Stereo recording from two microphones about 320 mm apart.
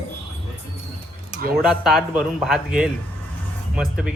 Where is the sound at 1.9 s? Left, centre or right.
Centre.